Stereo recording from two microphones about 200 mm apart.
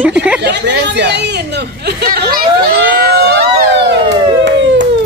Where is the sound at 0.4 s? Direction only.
60° right (ahead or behind).